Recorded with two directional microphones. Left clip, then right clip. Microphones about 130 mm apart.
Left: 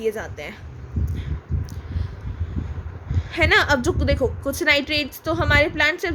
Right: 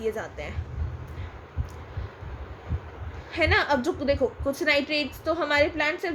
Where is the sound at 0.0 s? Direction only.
40° left (ahead or behind).